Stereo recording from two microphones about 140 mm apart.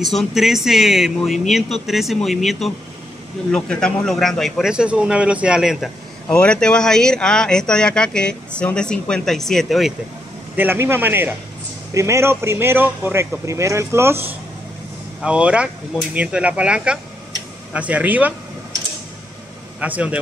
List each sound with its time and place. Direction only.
0.0 s speech: centre (ahead or behind)
10.5 s speech: 15° right (ahead or behind)
19.8 s speech: 10° right (ahead or behind)